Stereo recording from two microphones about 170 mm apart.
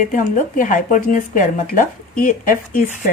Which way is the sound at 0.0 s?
50° left (ahead or behind).